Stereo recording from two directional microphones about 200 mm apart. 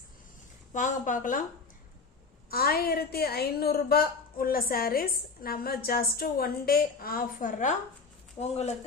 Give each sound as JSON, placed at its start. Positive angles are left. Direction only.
{"t": 0.7, "sound": "speech", "side_deg": 40}
{"t": 2.5, "sound": "a woman's voice", "side_deg": 50}
{"t": 8.4, "sound": "speech", "side_deg": 30}